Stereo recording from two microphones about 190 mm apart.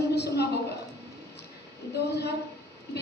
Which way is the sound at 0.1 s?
60° left (ahead or behind).